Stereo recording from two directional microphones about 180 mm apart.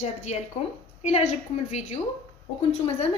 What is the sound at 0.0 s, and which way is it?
A woman's voice, 40° left (ahead or behind).